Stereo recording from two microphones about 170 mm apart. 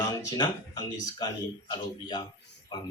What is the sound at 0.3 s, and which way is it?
Speech, 25° left (ahead or behind).